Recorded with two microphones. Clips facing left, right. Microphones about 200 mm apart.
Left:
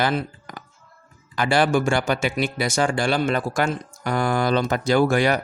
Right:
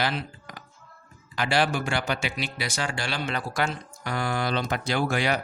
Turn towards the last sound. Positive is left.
turn(degrees=50)  # may be behind; listen again after turning